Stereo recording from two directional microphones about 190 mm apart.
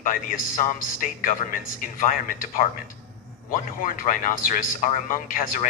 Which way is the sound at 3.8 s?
45° left (ahead or behind).